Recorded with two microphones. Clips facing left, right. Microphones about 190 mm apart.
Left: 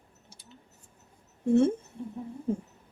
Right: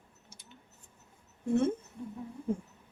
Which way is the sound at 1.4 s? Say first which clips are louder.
Left 6 dB; 30° left (ahead or behind).